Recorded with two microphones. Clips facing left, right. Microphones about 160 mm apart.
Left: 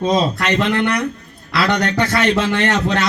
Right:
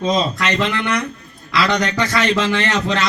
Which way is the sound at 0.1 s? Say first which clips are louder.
Left 1 dB; 55° left (ahead or behind).